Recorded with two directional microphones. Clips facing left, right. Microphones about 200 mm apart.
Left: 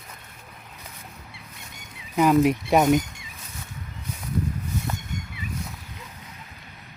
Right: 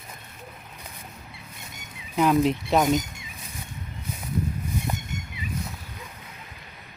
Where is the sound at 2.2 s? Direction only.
10° left (ahead or behind).